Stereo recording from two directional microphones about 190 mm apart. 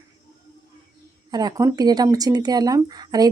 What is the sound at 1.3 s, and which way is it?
Speech, 20° right (ahead or behind).